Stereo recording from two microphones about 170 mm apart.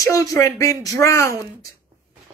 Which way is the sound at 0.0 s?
20° left (ahead or behind).